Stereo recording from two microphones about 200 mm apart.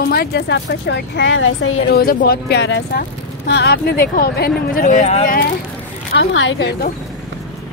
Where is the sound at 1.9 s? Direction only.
50° left (ahead or behind).